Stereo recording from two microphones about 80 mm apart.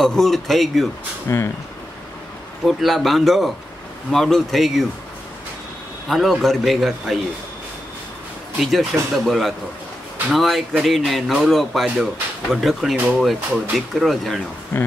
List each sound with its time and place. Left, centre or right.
0.0 s speech: centre
1.3 s speech: left
2.6 s speech: centre
6.0 s speech: centre
8.5 s speech: centre